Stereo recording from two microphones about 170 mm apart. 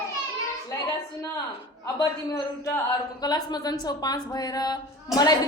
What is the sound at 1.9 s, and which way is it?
Speech, 20° left (ahead or behind).